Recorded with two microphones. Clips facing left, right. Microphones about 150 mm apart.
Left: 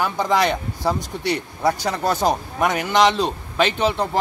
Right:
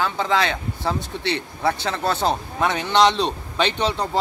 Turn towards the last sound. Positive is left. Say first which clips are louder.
# left 2 dB
turn(degrees=10)  # may be behind; listen again after turning